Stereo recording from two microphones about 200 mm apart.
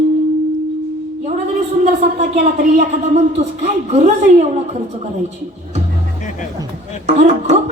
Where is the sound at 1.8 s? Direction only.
30° right (ahead or behind).